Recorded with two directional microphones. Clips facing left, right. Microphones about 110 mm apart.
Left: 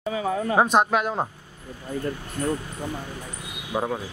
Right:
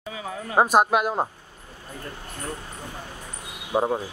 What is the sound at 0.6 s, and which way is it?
Speech, 5° right (ahead or behind).